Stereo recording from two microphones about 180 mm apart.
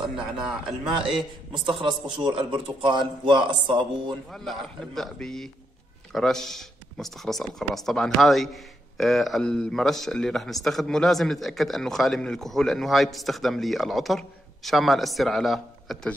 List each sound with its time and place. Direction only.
0.0 s a man's voice: 5° right (ahead or behind)
1.5 s a man's voice: 25° right (ahead or behind)
4.3 s speech: centre (ahead or behind)